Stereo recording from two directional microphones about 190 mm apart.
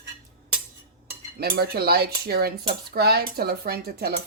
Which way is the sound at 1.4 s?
55° right (ahead or behind).